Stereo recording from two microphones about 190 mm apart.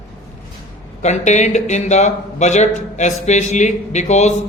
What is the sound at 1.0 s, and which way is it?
Speech, 40° left (ahead or behind).